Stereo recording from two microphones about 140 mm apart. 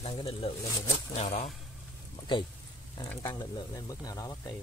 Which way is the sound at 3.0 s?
25° left (ahead or behind).